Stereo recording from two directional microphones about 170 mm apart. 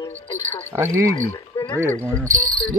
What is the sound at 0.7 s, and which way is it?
Speech, 15° right (ahead or behind).